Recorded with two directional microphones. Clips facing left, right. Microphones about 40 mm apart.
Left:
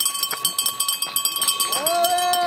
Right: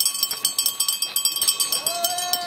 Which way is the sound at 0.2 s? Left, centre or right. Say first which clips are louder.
Left 3 dB; left.